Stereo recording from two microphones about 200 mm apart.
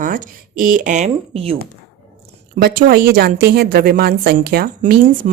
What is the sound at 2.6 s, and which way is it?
A woman's voice, 50° right (ahead or behind).